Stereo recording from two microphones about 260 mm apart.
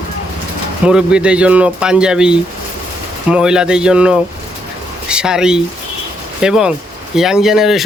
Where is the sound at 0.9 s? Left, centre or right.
Centre.